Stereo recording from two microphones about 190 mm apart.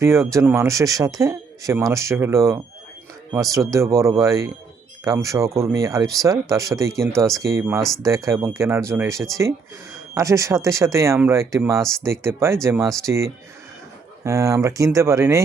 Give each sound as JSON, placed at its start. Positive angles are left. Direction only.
{"t": 0.0, "sound": "speech", "side_deg": -15}
{"t": 7.8, "sound": "speech", "side_deg": 0}
{"t": 8.0, "sound": "speech", "side_deg": -15}